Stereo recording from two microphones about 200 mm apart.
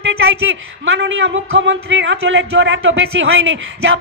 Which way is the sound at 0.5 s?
75° right (ahead or behind).